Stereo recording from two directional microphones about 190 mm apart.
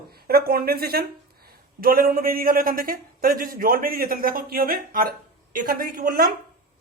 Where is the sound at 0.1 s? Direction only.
55° right (ahead or behind).